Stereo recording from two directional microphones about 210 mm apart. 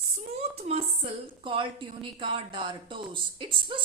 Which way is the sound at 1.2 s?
25° right (ahead or behind).